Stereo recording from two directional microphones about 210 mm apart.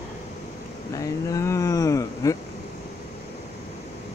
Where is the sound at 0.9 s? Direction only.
15° left (ahead or behind).